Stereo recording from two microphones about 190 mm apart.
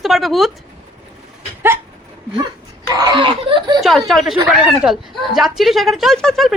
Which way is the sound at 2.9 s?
20° right (ahead or behind).